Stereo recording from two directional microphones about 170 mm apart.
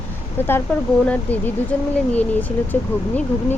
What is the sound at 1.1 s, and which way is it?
Speech, 10° left (ahead or behind).